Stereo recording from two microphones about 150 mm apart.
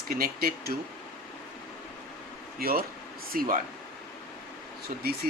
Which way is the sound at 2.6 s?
90° right.